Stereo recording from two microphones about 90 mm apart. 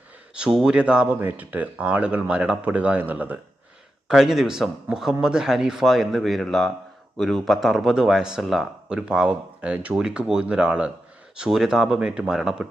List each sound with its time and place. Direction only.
0.3 s speech: 10° right (ahead or behind)
4.1 s speech: 5° right (ahead or behind)